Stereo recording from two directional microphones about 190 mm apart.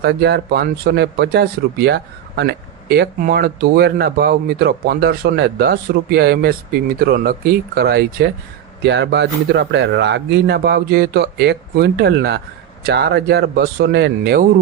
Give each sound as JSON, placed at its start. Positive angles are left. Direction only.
{"t": 0.0, "sound": "speech", "side_deg": -60}